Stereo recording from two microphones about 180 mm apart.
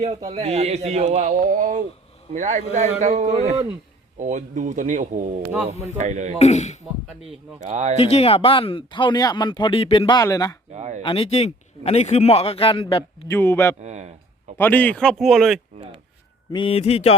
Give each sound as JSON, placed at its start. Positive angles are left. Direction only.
{"t": 0.0, "sound": "speech", "side_deg": -40}
{"t": 5.4, "sound": "speech", "side_deg": -5}
{"t": 6.0, "sound": "speech", "side_deg": -40}
{"t": 6.4, "sound": "speech", "side_deg": 40}
{"t": 7.7, "sound": "speech", "side_deg": -40}
{"t": 8.0, "sound": "speech", "side_deg": 35}
{"t": 10.7, "sound": "speech", "side_deg": -40}
{"t": 11.0, "sound": "speech", "side_deg": 30}
{"t": 13.2, "sound": "speech", "side_deg": 15}
{"t": 13.8, "sound": "speech", "side_deg": -40}
{"t": 14.6, "sound": "speech", "side_deg": 10}
{"t": 16.5, "sound": "speech", "side_deg": 30}